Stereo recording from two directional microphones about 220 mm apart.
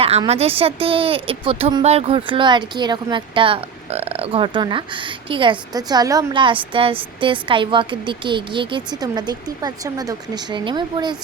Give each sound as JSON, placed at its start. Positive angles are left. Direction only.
{"t": 0.0, "sound": "a woman's voice", "side_deg": -25}